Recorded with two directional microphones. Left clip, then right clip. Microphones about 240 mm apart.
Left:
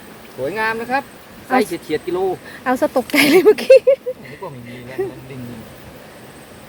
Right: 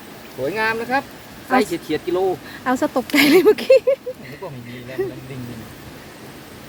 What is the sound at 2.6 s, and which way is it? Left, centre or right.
Speech, centre.